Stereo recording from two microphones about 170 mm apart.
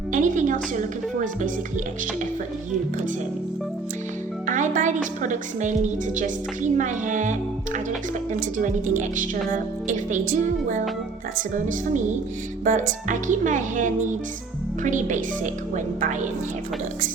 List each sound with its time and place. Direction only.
0.1 s a woman's voice: 50° right (ahead or behind)
4.4 s a woman's voice: 50° right (ahead or behind)